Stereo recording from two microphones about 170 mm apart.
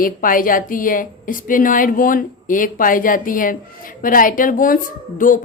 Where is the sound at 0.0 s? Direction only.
55° left (ahead or behind).